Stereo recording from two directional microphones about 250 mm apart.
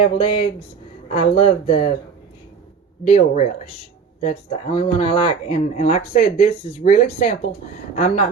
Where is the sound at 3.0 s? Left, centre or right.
Left.